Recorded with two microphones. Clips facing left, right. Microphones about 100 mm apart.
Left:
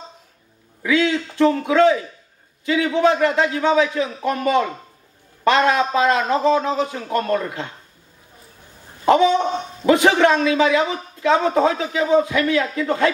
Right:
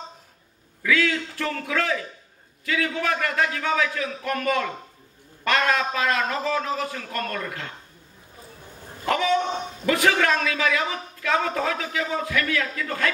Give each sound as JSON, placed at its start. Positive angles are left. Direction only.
{"t": 0.8, "sound": "a man's voice", "side_deg": 20}
{"t": 9.0, "sound": "a man's voice", "side_deg": 25}